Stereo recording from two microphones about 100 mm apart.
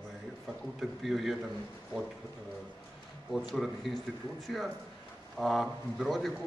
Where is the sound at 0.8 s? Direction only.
Centre (ahead or behind).